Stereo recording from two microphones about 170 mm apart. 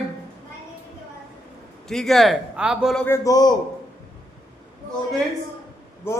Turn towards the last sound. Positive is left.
turn(degrees=15)  # may be behind; listen again after turning